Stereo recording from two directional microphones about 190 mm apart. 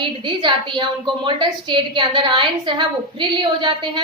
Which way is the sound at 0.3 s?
25° right (ahead or behind).